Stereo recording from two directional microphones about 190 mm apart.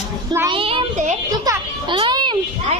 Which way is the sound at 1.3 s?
20° right (ahead or behind).